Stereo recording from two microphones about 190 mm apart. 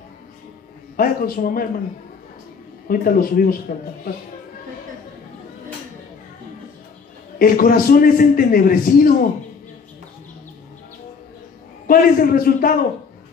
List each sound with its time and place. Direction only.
0.9 s a man's voice: 50° left (ahead or behind)
2.9 s a man's voice: 50° left (ahead or behind)
7.3 s a man's voice: 50° left (ahead or behind)
11.9 s a man's voice: 50° left (ahead or behind)